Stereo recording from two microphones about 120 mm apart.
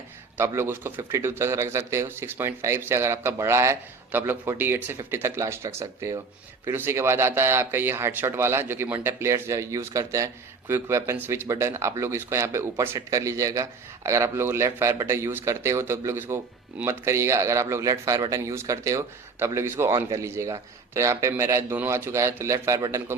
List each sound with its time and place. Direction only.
0.3 s speech: 20° right (ahead or behind)